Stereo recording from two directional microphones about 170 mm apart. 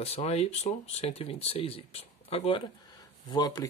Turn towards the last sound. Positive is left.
turn(degrees=25)  # may be behind; listen again after turning